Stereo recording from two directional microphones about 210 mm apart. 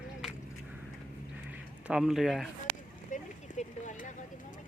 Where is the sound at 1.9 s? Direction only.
5° right (ahead or behind).